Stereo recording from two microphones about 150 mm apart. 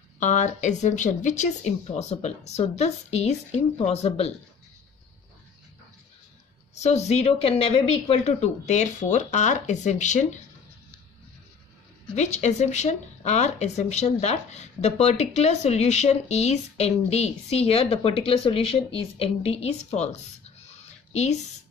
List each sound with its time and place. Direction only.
0.2 s speech: 50° left (ahead or behind)
6.7 s speech: 50° left (ahead or behind)
12.2 s speech: 50° left (ahead or behind)
20.6 s a sound: 45° left (ahead or behind)